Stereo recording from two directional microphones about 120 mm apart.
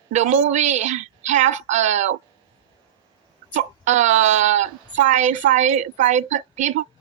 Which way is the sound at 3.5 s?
75° right (ahead or behind).